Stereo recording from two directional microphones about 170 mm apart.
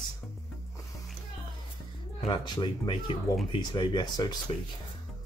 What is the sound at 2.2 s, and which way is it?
Speech, 25° left (ahead or behind).